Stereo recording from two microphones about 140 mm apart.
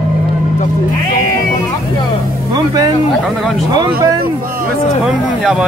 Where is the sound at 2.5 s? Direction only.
30° right (ahead or behind).